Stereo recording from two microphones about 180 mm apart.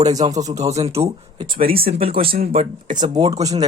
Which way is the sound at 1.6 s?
55° right (ahead or behind).